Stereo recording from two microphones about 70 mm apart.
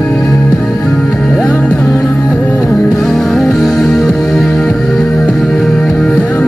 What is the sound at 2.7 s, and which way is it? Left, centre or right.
Music, centre.